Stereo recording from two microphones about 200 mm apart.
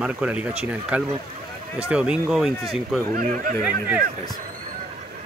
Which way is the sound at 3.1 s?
45° right (ahead or behind).